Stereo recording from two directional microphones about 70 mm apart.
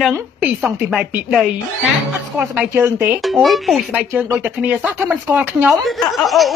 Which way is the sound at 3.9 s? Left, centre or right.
Right.